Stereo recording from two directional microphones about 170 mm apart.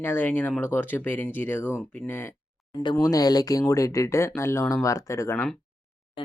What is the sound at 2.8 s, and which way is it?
Speech, 25° left (ahead or behind).